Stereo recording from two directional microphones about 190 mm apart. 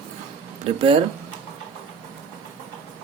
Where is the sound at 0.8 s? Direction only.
30° right (ahead or behind).